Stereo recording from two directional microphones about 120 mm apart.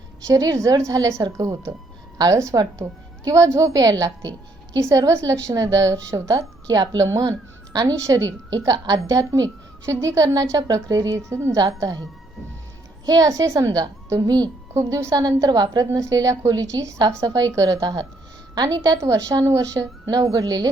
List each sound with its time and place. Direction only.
0.3 s a woman's voice: 30° right (ahead or behind)
11.5 s a woman's voice: 35° right (ahead or behind)
13.1 s a woman's voice: 30° right (ahead or behind)